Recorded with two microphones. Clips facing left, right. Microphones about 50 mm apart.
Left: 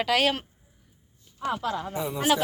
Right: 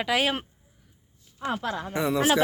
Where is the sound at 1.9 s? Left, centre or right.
Right.